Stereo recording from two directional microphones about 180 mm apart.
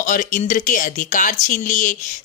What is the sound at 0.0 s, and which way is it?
Speech, 45° left (ahead or behind).